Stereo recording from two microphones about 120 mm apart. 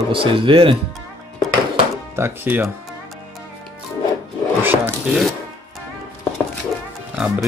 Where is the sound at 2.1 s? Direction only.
20° right (ahead or behind).